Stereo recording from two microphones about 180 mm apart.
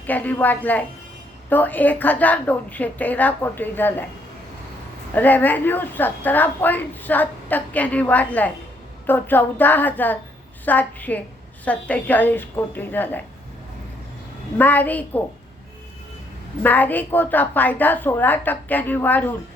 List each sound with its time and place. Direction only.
0.0 s a woman's voice: 10° left (ahead or behind)
5.1 s a woman's voice: 10° left (ahead or behind)
14.6 s a woman's voice: 10° left (ahead or behind)
16.6 s a woman's voice: 10° left (ahead or behind)